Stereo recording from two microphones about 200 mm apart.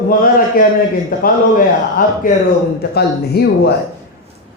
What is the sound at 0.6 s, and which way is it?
A man's voice, 45° left (ahead or behind).